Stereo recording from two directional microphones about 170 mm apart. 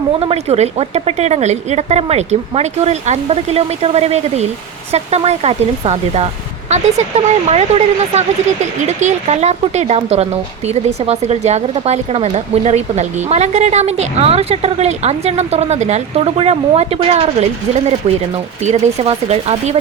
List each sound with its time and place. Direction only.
0.2 s speech: 35° right (ahead or behind)
18.6 s speech: 40° right (ahead or behind)